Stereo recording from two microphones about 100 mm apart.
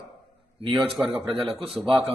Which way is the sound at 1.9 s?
60° right (ahead or behind).